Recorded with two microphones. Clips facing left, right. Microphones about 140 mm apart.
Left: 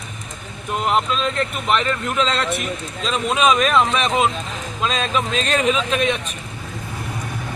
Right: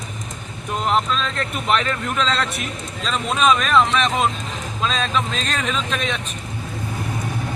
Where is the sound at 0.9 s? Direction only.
5° left (ahead or behind).